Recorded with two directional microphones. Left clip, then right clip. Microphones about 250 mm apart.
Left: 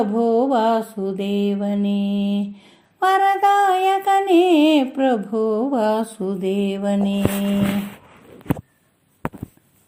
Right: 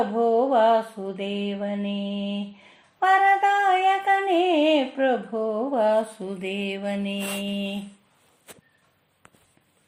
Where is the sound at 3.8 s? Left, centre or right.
Left.